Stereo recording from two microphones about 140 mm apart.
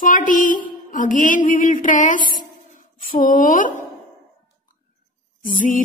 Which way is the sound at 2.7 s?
70° left (ahead or behind).